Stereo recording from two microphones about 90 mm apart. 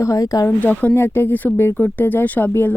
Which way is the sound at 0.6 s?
20° left (ahead or behind).